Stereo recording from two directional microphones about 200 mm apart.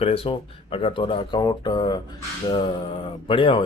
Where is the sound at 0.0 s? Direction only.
30° left (ahead or behind).